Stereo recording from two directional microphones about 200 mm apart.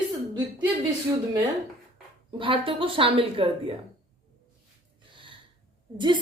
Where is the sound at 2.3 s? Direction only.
25° right (ahead or behind).